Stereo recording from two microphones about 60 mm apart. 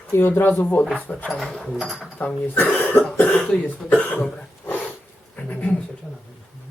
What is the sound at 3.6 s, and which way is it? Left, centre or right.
Speech, left.